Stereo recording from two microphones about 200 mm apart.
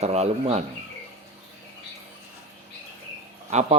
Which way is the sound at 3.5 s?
35° right (ahead or behind).